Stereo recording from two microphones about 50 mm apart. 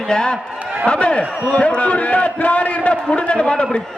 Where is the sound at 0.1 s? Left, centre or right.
Centre.